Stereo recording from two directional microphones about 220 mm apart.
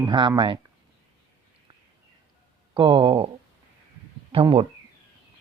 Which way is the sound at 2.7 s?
20° right (ahead or behind).